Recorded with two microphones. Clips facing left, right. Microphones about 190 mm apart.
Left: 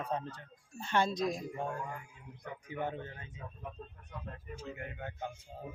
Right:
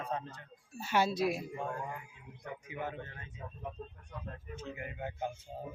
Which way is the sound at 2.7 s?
35° left (ahead or behind).